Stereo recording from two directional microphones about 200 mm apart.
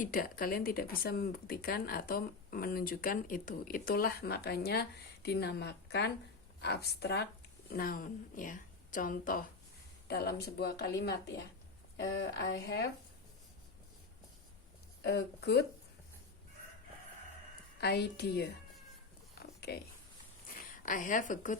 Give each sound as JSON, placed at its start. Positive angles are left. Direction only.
{"t": 0.0, "sound": "a woman's voice", "side_deg": 45}
{"t": 15.0, "sound": "a woman's voice", "side_deg": 55}
{"t": 17.7, "sound": "a woman's voice", "side_deg": 55}
{"t": 19.4, "sound": "a sound", "side_deg": 55}
{"t": 20.7, "sound": "a woman's voice", "side_deg": 40}